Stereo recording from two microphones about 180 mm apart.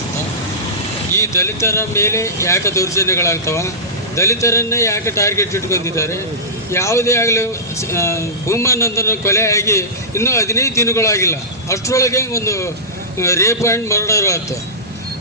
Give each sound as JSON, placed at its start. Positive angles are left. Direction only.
{"t": 1.1, "sound": "speech", "side_deg": 15}